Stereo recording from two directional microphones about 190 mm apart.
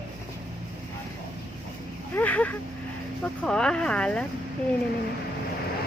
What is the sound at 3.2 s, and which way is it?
Speech, 5° left (ahead or behind).